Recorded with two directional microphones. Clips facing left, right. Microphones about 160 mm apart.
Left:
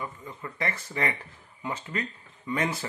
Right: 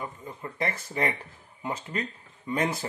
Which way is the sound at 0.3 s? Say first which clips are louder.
Right 2 dB; 30° right (ahead or behind).